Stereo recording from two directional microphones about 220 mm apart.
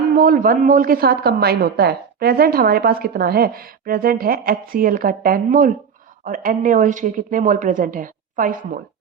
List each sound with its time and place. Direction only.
0.2 s speech: 40° right (ahead or behind)